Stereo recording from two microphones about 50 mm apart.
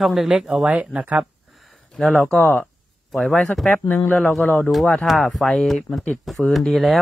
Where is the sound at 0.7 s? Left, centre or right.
Right.